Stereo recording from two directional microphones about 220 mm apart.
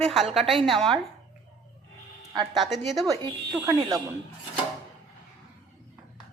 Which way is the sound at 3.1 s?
15° right (ahead or behind).